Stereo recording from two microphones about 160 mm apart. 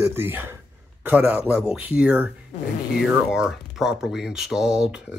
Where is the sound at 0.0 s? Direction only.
15° right (ahead or behind).